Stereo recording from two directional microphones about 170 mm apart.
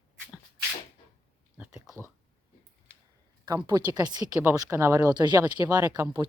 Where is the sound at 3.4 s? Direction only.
20° right (ahead or behind).